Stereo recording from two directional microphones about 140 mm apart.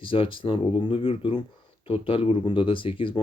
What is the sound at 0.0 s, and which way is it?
Speech, 40° left (ahead or behind).